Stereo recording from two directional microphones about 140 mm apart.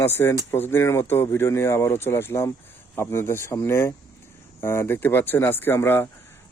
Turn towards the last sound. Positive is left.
turn(degrees=15)  # may be behind; listen again after turning